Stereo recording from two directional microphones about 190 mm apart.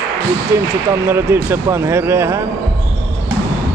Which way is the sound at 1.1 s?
10° right (ahead or behind).